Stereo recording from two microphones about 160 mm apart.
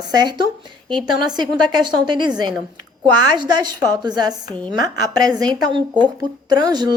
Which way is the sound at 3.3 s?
25° right (ahead or behind).